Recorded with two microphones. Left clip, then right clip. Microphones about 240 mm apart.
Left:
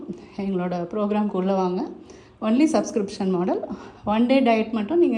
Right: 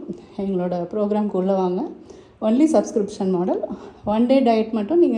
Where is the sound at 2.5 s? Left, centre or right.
Centre.